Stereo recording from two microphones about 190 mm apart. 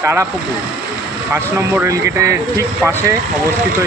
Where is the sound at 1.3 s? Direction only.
15° right (ahead or behind).